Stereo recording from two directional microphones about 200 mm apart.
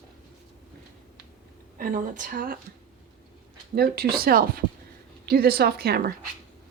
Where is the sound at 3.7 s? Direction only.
50° right (ahead or behind).